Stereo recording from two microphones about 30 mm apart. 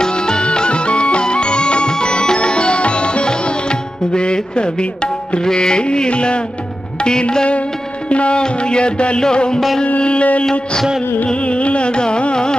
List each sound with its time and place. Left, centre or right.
0.0 s music: left
5.4 s carnatic music: left
7.0 s music: left
8.1 s music: left
8.4 s carnatic music: left
9.2 s music: left
9.9 s carnatic music: left
11.4 s carnatic music: left